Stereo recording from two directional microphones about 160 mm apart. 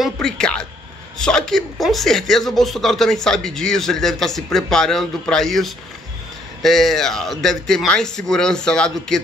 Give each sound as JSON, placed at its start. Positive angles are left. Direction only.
{"t": 0.0, "sound": "speech", "side_deg": 5}